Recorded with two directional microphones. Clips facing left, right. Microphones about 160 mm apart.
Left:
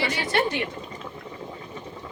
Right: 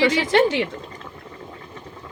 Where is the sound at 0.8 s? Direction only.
15° left (ahead or behind).